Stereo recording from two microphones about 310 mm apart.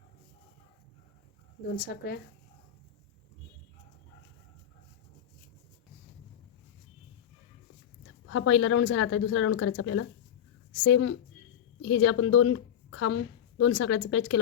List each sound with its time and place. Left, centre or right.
1.7 s speech: left
8.3 s a woman's voice: left